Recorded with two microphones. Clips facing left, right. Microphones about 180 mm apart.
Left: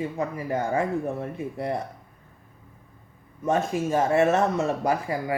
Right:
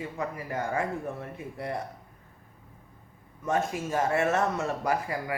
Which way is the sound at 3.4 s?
25° left (ahead or behind).